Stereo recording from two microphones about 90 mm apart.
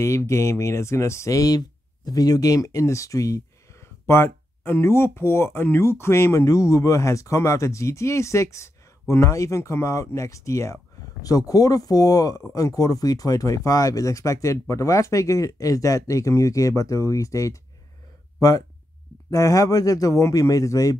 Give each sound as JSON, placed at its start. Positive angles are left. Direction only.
{"t": 0.0, "sound": "speech", "side_deg": 30}
{"t": 19.3, "sound": "speech", "side_deg": 40}